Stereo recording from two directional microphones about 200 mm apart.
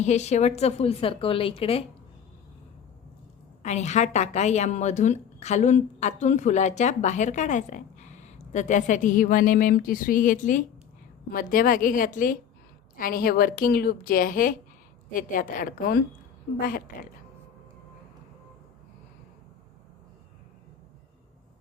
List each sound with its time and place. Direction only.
0.0 s a woman's voice: 35° left (ahead or behind)
3.6 s a woman's voice: 35° left (ahead or behind)